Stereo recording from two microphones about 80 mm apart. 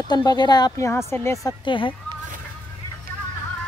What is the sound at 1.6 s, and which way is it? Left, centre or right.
Speech, left.